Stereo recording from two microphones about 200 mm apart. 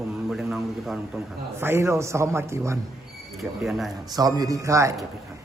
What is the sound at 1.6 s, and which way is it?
A man's voice, 15° right (ahead or behind).